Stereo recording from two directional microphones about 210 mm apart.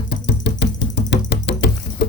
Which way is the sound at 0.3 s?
55° left (ahead or behind).